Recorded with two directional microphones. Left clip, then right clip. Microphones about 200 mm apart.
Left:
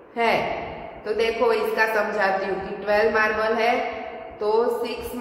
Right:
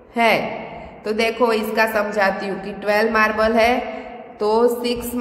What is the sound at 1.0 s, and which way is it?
A man's voice, 50° right (ahead or behind).